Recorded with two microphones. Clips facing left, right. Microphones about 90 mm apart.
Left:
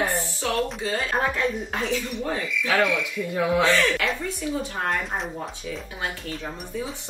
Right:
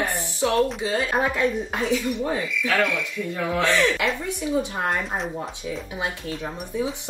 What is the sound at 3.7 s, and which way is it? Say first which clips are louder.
Speech: right 1 dB; 15° right (ahead or behind).